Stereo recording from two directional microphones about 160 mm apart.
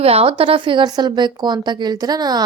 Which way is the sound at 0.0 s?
40° right (ahead or behind).